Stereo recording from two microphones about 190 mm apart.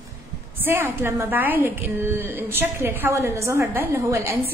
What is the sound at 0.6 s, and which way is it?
A woman's voice, 10° right (ahead or behind).